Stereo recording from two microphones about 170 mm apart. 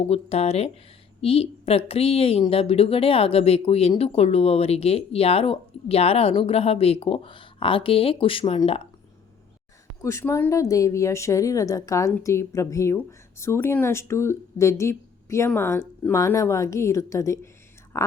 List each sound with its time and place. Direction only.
0.1 s speech: 35° left (ahead or behind)
10.0 s a woman's voice: 15° left (ahead or behind)